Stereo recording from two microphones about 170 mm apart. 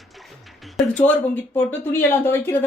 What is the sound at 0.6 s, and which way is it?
A woman's voice, 5° left (ahead or behind).